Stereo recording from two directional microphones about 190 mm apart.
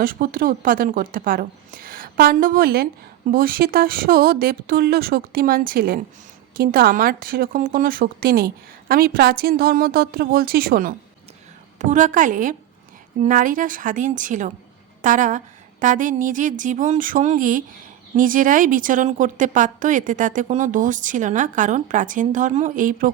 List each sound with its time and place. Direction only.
0.0 s a woman's voice: 50° right (ahead or behind)